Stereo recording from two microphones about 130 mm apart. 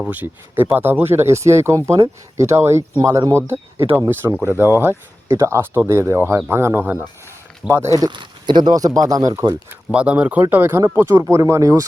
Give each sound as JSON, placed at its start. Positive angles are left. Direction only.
{"t": 0.1, "sound": "speech", "side_deg": -15}
{"t": 9.9, "sound": "speech", "side_deg": -10}